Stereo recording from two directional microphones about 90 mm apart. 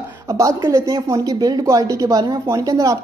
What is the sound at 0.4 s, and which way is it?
A woman's voice, 35° right (ahead or behind).